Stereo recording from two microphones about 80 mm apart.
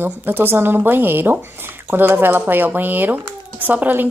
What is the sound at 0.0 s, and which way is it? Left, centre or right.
Speech, right.